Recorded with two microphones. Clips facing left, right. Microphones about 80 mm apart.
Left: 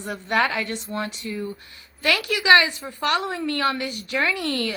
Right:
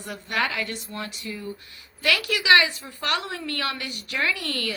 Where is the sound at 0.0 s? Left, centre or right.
Left.